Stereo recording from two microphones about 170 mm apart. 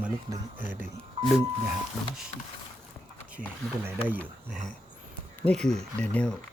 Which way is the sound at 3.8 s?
10° right (ahead or behind).